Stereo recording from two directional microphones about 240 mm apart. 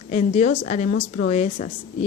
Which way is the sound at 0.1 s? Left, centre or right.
Left.